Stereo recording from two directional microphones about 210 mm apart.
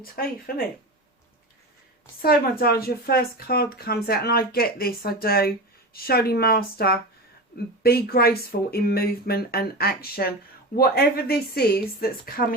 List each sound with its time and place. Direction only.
0.0 s speech: 45° left (ahead or behind)
2.2 s speech: 45° left (ahead or behind)